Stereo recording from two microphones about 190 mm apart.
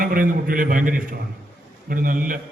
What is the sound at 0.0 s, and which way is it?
A man's voice, 50° right (ahead or behind).